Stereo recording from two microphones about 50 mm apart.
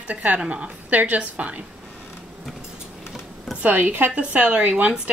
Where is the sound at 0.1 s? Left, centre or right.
Right.